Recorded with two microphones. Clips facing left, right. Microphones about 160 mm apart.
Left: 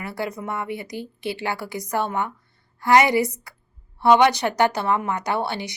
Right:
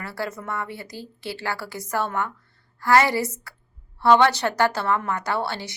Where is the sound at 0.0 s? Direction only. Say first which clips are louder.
Left 2 dB; 20° left (ahead or behind).